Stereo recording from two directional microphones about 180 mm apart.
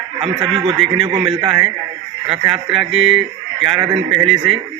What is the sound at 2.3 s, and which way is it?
Speech, 30° right (ahead or behind).